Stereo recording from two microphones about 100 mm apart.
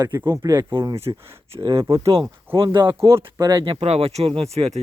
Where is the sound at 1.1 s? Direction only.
40° right (ahead or behind).